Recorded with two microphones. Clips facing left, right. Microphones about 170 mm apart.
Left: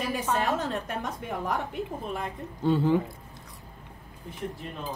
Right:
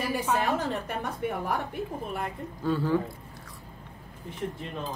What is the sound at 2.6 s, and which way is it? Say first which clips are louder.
Speech: left 3 dB; 25° left (ahead or behind).